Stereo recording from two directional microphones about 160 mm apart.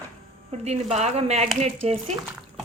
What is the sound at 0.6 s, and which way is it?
Speech, 40° right (ahead or behind).